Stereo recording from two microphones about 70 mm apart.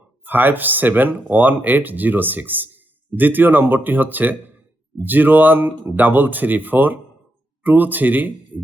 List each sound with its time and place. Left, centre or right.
0.3 s speech: right